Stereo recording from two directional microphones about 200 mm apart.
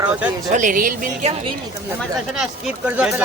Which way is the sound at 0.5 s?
40° right (ahead or behind).